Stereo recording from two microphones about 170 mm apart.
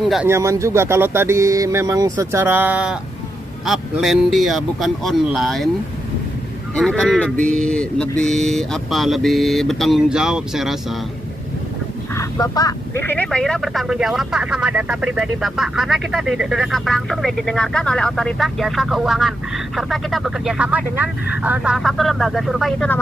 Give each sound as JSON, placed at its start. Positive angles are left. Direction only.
{"t": 0.0, "sound": "speech", "side_deg": 0}
{"t": 0.3, "sound": "speech", "side_deg": -15}
{"t": 6.7, "sound": "speech", "side_deg": 5}
{"t": 12.2, "sound": "speech", "side_deg": 20}